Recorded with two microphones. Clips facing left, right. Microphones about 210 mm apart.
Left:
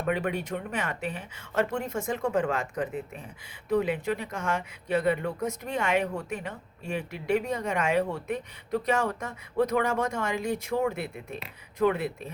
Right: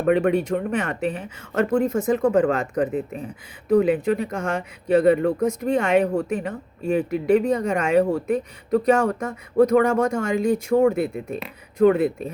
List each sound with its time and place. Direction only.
0.0 s speech: 50° right (ahead or behind)
5.5 s speech: 35° right (ahead or behind); by 12.1 s 50° right (ahead or behind)